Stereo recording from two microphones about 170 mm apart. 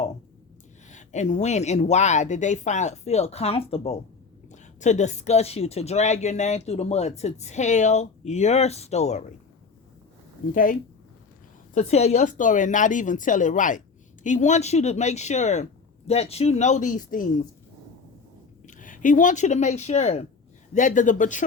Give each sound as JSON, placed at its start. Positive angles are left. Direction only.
{"t": 0.9, "sound": "a woman's voice", "side_deg": 45}
{"t": 10.5, "sound": "speech", "side_deg": 55}
{"t": 11.7, "sound": "speech", "side_deg": 40}
{"t": 18.6, "sound": "speech", "side_deg": 50}